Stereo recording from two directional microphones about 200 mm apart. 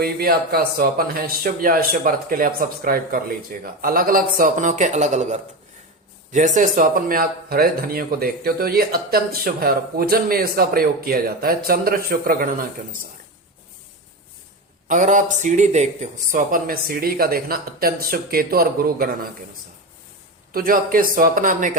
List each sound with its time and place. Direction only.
0.0 s speech: 50° right (ahead or behind)
14.8 s speech: 40° right (ahead or behind)
20.5 s speech: 45° right (ahead or behind)